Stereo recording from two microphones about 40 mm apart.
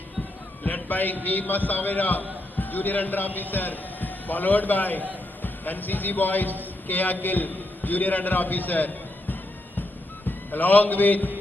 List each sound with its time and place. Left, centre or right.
0.6 s a man's voice: left
10.2 s a man's voice: left